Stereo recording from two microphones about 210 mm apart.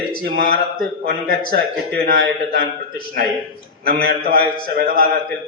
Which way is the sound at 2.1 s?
45° right (ahead or behind).